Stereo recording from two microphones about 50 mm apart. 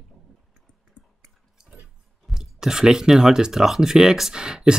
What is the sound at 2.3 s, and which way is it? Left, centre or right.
Speech, centre.